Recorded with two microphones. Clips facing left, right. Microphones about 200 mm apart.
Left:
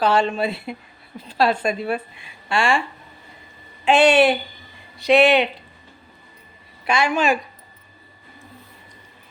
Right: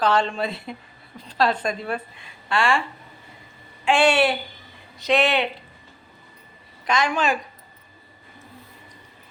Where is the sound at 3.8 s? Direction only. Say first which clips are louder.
Left 4 dB; 20° left (ahead or behind).